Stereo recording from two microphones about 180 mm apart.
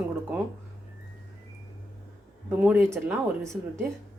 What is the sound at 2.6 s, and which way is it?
Speech, 10° right (ahead or behind).